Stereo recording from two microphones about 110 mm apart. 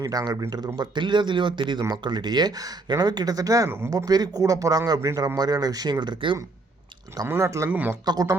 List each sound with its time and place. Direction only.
0.0 s speech: 35° right (ahead or behind)
7.3 s speech: 25° right (ahead or behind)
7.7 s a man's voice: 15° right (ahead or behind)
8.0 s speech: 35° right (ahead or behind)